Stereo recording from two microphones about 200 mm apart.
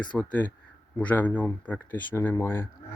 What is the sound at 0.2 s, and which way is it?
Speech, 10° left (ahead or behind).